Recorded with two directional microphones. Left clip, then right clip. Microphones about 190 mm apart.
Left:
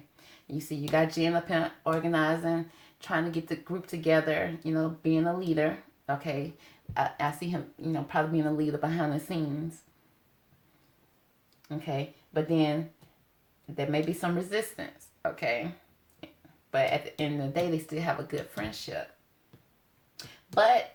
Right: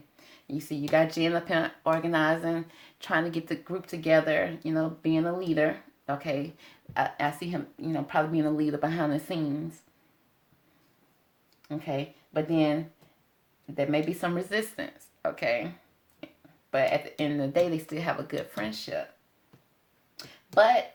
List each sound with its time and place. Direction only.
0.4 s speech: 35° right (ahead or behind)
11.7 s speech: 35° right (ahead or behind)
13.7 s speech: 35° right (ahead or behind)
16.7 s speech: 35° right (ahead or behind)
20.1 s a sound: 35° right (ahead or behind)